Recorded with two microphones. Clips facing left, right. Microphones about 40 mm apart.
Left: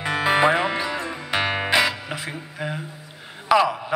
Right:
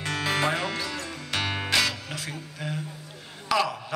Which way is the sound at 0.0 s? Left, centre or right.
Centre.